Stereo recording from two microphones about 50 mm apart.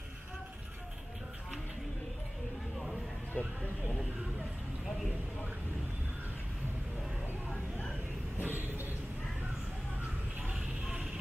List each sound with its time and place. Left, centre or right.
3.4 s a sound: left
8.4 s vehicle: right
10.4 s vehicle: centre